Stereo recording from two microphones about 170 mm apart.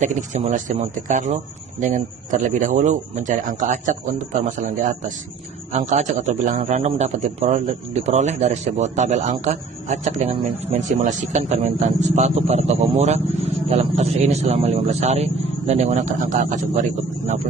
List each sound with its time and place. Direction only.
0.0 s a man's voice: 45° right (ahead or behind)